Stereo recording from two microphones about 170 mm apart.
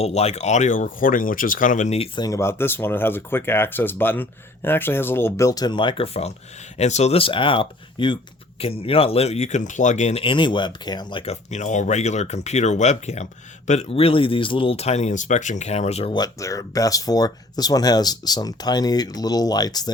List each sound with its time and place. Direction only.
0.0 s speech: 40° left (ahead or behind)
2.1 s speech: 20° left (ahead or behind)
11.3 s speech: 45° left (ahead or behind)
16.1 s speech: 20° left (ahead or behind)